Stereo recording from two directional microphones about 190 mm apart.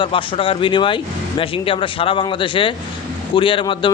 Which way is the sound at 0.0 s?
25° left (ahead or behind).